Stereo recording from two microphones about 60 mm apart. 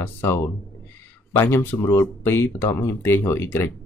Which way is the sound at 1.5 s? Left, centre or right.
Left.